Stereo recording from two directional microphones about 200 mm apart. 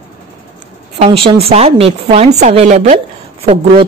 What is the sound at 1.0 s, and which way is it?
A woman's voice, 30° right (ahead or behind).